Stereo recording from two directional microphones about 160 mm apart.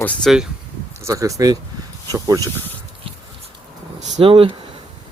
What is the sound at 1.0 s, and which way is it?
Speech, 20° right (ahead or behind).